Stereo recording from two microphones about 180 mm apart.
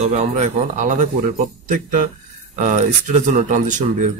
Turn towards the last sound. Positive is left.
turn(degrees=-45)  # may be behind; listen again after turning